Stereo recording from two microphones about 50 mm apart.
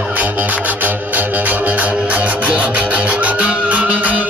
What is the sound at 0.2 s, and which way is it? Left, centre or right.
Music, right.